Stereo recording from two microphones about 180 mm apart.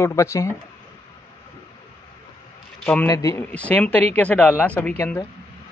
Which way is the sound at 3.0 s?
20° left (ahead or behind).